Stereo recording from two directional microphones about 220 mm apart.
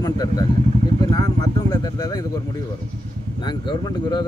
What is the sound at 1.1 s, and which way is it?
Vehicle, 15° left (ahead or behind).